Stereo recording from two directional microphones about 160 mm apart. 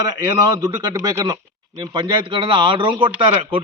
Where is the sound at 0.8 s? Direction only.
20° right (ahead or behind).